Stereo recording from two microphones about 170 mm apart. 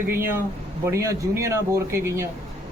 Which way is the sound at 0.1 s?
15° right (ahead or behind).